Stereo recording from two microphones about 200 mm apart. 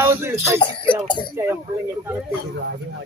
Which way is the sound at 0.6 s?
25° left (ahead or behind).